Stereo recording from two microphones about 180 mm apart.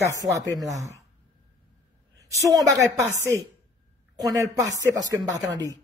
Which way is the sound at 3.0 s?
10° left (ahead or behind).